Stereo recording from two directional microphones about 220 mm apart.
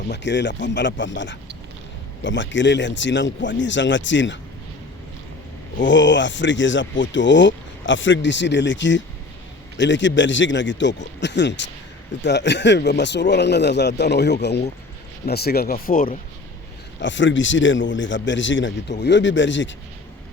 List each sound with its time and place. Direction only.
0.1 s speech: 55° left (ahead or behind)
5.8 s speech: 55° left (ahead or behind)
17.0 s speech: 55° left (ahead or behind)